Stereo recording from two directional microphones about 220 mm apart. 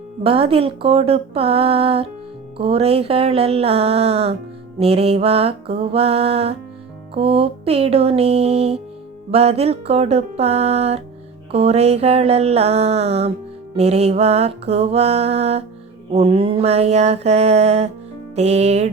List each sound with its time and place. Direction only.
0.2 s speech: 25° right (ahead or behind)